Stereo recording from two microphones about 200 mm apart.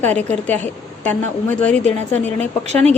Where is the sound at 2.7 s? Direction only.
35° right (ahead or behind).